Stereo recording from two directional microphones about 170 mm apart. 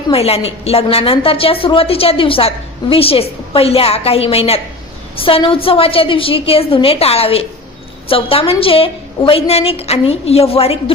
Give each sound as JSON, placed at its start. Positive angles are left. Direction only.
{"t": 0.1, "sound": "a woman's voice", "side_deg": 35}